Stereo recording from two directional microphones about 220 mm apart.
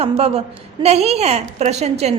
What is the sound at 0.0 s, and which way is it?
A woman's voice, 25° right (ahead or behind).